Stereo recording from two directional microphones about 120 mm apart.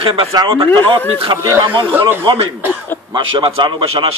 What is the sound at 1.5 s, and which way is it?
Speech, 35° right (ahead or behind).